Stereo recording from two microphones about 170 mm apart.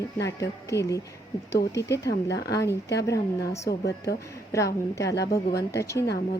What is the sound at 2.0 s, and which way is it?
Speech, 85° left.